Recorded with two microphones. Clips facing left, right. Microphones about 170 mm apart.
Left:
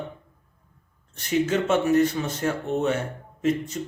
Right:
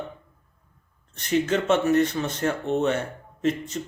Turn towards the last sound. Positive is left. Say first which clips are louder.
# left 1 dB
turn(degrees=10)  # may be behind; listen again after turning